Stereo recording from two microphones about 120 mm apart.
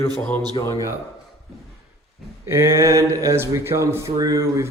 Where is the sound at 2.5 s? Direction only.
20° right (ahead or behind).